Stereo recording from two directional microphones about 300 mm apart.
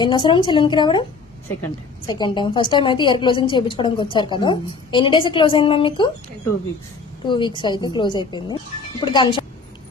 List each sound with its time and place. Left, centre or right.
0.0 s a woman's voice: centre
2.0 s a woman's voice: centre
7.3 s a woman's voice: centre